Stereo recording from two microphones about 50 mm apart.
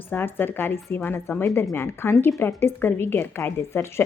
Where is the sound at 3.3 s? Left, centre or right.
Left.